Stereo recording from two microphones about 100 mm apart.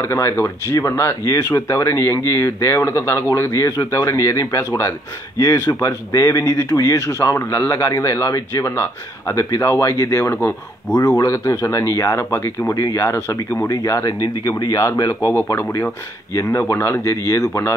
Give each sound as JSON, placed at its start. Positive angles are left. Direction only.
{"t": 0.0, "sound": "speech", "side_deg": 30}